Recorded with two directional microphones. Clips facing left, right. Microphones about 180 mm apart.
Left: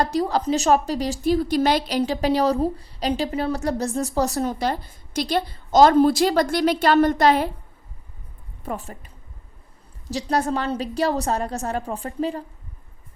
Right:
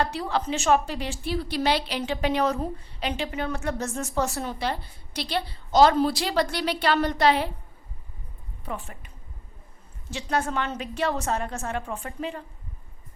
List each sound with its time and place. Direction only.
0.0 s a woman's voice: 40° left (ahead or behind)
8.6 s a woman's voice: 40° left (ahead or behind)